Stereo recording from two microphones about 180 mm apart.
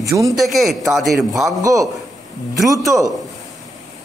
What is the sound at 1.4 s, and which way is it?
Speech, 15° right (ahead or behind).